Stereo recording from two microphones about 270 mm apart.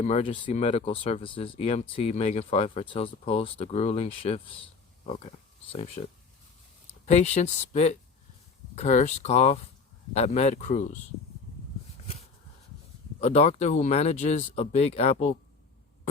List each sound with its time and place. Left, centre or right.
0.0 s speech: left
5.7 s speech: left
13.1 s speech: left